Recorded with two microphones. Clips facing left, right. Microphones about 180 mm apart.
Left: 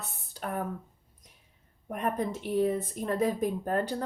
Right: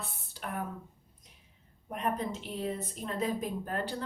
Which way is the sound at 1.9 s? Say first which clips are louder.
Left 3 dB; 50° left (ahead or behind).